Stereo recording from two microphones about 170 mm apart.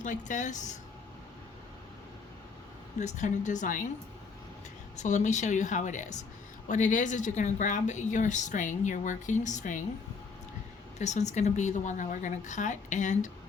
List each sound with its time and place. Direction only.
0.0 s speech: 45° left (ahead or behind)
3.0 s speech: 45° left (ahead or behind)
4.9 s speech: 45° left (ahead or behind)
11.0 s speech: 45° left (ahead or behind)